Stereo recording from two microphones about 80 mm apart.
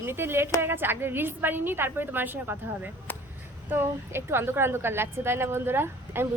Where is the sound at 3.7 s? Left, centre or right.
Right.